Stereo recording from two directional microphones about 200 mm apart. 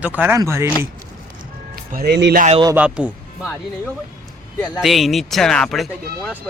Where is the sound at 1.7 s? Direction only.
50° right (ahead or behind).